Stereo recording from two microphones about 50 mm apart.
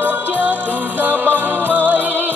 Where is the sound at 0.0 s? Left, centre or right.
Right.